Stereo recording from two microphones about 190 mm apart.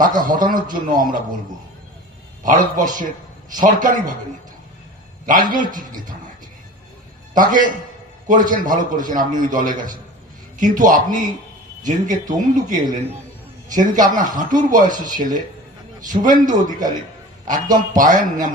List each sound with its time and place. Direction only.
0.2 s a man's voice: 45° right (ahead or behind)
2.4 s a man's voice: 45° right (ahead or behind)
5.2 s a man's voice: 45° right (ahead or behind)
7.3 s a man's voice: 45° right (ahead or behind)